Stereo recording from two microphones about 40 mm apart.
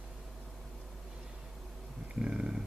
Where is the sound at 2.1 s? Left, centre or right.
Right.